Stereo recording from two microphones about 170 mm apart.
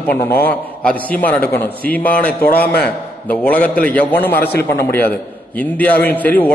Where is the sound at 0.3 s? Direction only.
10° left (ahead or behind).